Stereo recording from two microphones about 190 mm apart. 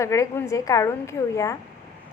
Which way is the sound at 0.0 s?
15° left (ahead or behind).